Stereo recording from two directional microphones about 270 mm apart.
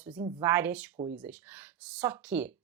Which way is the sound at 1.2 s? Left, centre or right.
Centre.